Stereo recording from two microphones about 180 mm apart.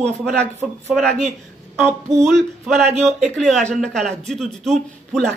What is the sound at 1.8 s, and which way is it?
Music, 15° right (ahead or behind).